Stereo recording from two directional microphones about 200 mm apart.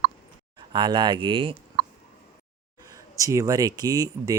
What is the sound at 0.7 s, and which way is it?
Speech, 20° right (ahead or behind).